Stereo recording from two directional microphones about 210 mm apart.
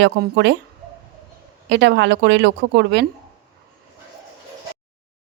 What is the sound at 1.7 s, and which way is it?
Speech, 55° right (ahead or behind).